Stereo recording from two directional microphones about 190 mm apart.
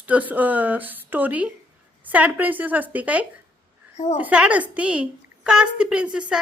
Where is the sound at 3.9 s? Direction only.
35° left (ahead or behind).